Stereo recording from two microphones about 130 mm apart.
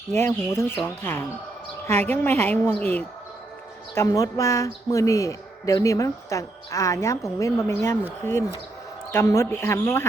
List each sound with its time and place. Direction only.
0.1 s speech: 20° left (ahead or behind)
1.9 s a woman's voice: 55° right (ahead or behind)
2.1 s a woman's voice: 15° left (ahead or behind)
3.9 s a woman's voice: 25° left (ahead or behind)